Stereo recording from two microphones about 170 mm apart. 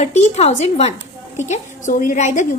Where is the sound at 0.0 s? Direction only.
40° left (ahead or behind).